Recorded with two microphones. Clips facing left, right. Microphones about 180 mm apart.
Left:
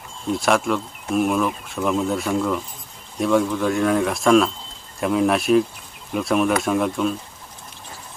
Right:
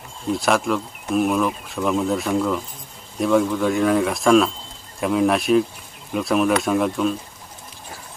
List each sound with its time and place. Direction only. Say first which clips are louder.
0.3 s speech: even; centre (ahead or behind)